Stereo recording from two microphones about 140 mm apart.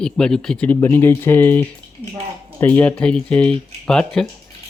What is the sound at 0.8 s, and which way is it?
Speech, 15° left (ahead or behind).